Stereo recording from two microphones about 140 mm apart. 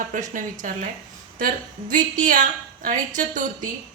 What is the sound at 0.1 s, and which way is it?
A woman's voice, 65° right (ahead or behind).